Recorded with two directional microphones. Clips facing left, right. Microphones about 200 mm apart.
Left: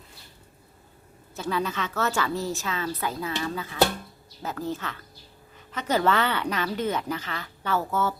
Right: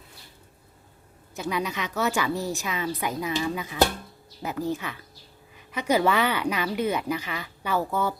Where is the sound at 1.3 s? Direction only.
15° right (ahead or behind).